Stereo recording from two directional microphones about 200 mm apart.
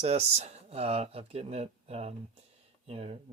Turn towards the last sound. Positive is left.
turn(degrees=-30)  # may be behind; listen again after turning